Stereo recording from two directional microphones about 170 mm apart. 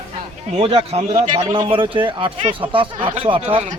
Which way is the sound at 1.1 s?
50° right (ahead or behind).